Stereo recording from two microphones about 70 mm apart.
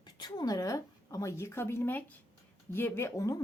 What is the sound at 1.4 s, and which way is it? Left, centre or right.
Speech, left.